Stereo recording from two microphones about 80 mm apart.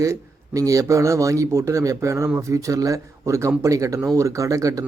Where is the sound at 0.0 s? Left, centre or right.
Right.